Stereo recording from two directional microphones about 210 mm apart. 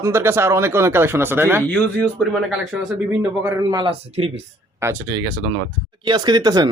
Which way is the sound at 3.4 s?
15° right (ahead or behind).